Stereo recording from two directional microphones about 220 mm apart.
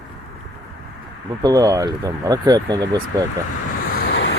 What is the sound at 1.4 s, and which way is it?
Speech, 15° right (ahead or behind).